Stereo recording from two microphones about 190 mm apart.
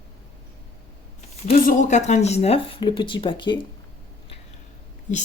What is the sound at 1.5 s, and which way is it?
Speech, 40° left (ahead or behind).